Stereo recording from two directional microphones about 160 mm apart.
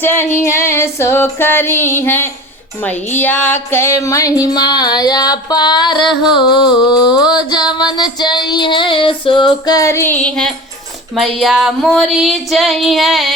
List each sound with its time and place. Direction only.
0.0 s female singing: 15° left (ahead or behind)
2.8 s music: 10° left (ahead or behind)
11.1 s female singing: centre (ahead or behind)